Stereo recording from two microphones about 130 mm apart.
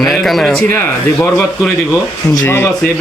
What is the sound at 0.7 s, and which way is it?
Speech, 20° left (ahead or behind).